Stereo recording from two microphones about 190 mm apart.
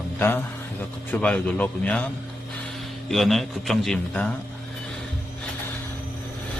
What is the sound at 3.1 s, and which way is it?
A man's voice, centre (ahead or behind).